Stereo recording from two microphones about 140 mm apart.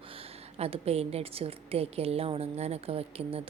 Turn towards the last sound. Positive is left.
turn(degrees=-45)  # may be behind; listen again after turning